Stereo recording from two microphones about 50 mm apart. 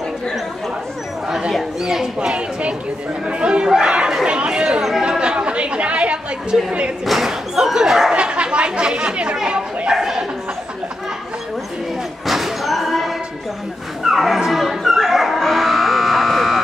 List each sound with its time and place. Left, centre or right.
1.8 s speech: centre
4.1 s chatter: centre
6.5 s speech: centre
7.1 s slam: centre
8.1 s chatter: centre
9.9 s a sound: centre
12.3 s a sound: centre
14.0 s music: centre
14.4 s a sound: centre